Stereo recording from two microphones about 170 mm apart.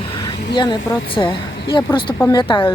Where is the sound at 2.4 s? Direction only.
30° left (ahead or behind).